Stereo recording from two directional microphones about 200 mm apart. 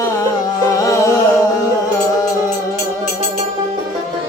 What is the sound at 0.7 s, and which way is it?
Music, 15° left (ahead or behind).